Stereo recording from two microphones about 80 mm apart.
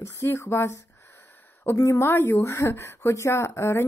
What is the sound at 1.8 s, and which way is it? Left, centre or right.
Speech, left.